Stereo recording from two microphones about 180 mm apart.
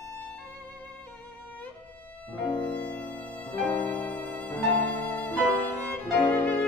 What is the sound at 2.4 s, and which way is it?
Music, 25° left (ahead or behind).